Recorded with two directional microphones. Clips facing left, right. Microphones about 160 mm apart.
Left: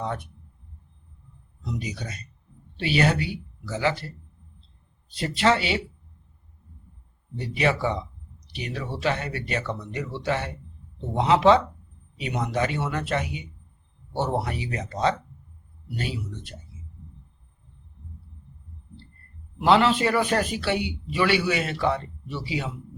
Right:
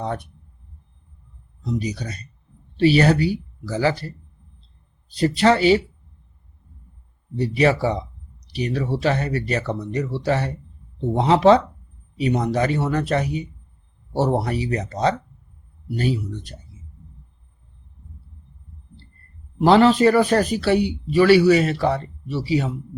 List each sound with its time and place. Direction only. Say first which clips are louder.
0.0 s a sound: right 3 dB; 35° right (ahead or behind)
1.8 s speech: right 6 dB; 35° right (ahead or behind)
5.1 s speech: right 5 dB; 35° right (ahead or behind)
7.3 s speech: right 6 dB; 35° right (ahead or behind)
19.5 s speech: right 5 dB; 40° right (ahead or behind)